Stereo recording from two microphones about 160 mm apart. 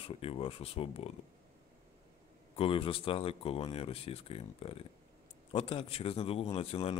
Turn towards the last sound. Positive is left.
turn(degrees=35)  # may be behind; listen again after turning